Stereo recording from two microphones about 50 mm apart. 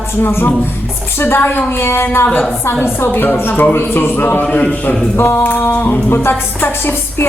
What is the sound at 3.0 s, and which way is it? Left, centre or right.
A woman's voice, left.